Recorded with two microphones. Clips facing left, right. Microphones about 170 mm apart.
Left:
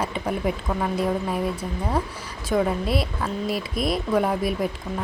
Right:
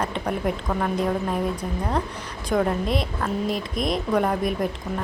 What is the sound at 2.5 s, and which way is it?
A woman's voice, 5° left (ahead or behind).